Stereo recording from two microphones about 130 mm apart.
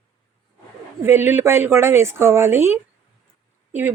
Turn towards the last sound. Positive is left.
turn(degrees=-15)  # may be behind; listen again after turning